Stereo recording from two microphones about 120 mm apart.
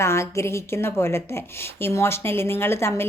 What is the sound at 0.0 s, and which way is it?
A woman's voice, 20° left (ahead or behind).